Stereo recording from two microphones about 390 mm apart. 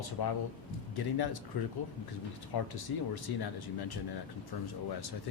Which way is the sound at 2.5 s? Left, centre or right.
Left.